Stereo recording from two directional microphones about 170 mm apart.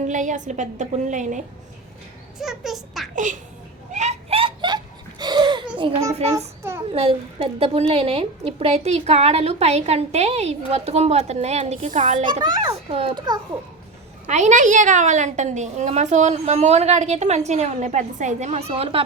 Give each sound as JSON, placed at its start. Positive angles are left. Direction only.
{"t": 0.1, "sound": "a woman's voice", "side_deg": -45}
{"t": 2.4, "sound": "a child's voice", "side_deg": 0}
{"t": 3.9, "sound": "a sound", "side_deg": -40}
{"t": 6.6, "sound": "a sound", "side_deg": -15}
{"t": 6.9, "sound": "a woman's voice", "side_deg": -35}
{"t": 12.2, "sound": "a child's voice", "side_deg": -25}
{"t": 14.3, "sound": "a woman's voice", "side_deg": -45}